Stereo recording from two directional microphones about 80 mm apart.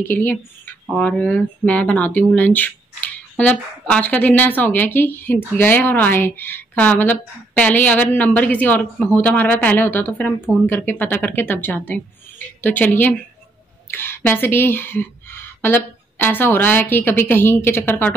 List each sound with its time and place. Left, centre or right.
0.1 s speech: left